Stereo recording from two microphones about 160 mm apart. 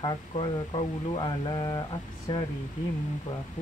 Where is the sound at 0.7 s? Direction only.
25° left (ahead or behind).